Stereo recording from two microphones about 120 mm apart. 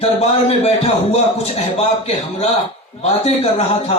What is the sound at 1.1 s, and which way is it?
A man's voice, 60° left (ahead or behind).